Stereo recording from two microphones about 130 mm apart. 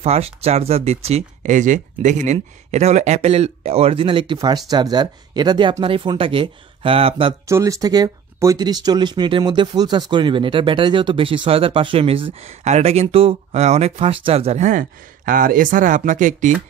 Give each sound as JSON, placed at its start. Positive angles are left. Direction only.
{"t": 0.0, "sound": "speech", "side_deg": -50}
{"t": 1.4, "sound": "speech", "side_deg": -75}
{"t": 2.3, "sound": "speech", "side_deg": -55}
{"t": 7.4, "sound": "speech", "side_deg": -25}